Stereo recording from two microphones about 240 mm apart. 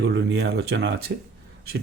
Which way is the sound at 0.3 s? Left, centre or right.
Right.